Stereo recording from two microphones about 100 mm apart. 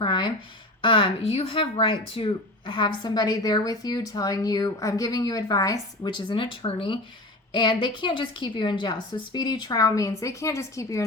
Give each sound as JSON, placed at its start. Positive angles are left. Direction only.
{"t": 0.0, "sound": "speech", "side_deg": 50}
{"t": 0.8, "sound": "speech", "side_deg": 60}
{"t": 6.1, "sound": "speech", "side_deg": 50}
{"t": 7.5, "sound": "a woman's voice", "side_deg": 50}